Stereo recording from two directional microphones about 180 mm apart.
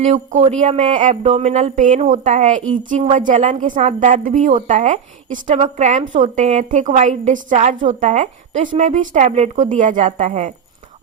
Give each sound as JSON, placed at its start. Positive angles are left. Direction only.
{"t": 0.0, "sound": "a woman's voice", "side_deg": -40}